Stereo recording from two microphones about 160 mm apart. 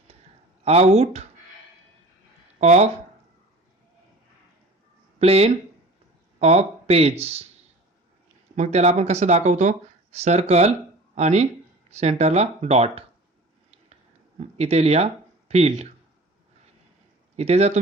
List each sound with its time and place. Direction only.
0.6 s speech: 40° right (ahead or behind)
2.6 s speech: 45° right (ahead or behind)
5.2 s speech: 40° right (ahead or behind)
8.5 s speech: 45° right (ahead or behind)
13.7 s a sound: 45° right (ahead or behind)
17.3 s speech: 40° right (ahead or behind)